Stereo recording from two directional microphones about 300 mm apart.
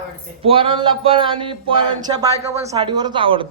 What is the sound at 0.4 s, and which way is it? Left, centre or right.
Speech, centre.